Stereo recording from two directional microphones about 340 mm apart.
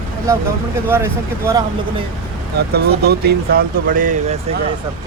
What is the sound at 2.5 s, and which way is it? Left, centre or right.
Speech, right.